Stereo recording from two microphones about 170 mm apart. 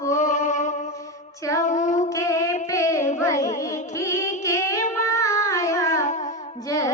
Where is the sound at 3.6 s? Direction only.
20° left (ahead or behind).